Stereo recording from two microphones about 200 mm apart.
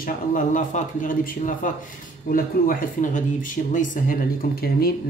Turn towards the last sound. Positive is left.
turn(degrees=50)  # may be behind; listen again after turning